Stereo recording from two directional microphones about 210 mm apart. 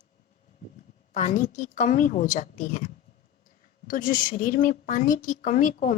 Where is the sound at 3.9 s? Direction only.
40° left (ahead or behind).